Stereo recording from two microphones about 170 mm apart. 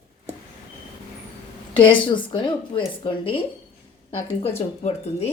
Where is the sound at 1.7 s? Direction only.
30° left (ahead or behind).